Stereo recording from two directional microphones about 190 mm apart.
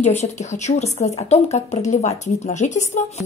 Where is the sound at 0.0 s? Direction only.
35° left (ahead or behind).